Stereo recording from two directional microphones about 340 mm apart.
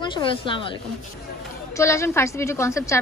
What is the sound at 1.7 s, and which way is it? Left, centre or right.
A woman's voice, centre.